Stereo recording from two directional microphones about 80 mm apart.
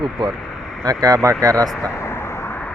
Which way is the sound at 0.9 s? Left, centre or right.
Right.